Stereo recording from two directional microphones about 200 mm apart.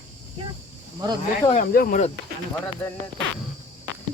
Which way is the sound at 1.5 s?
40° left (ahead or behind).